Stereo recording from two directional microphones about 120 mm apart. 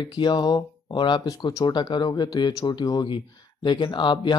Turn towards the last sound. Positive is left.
turn(degrees=40)  # may be behind; listen again after turning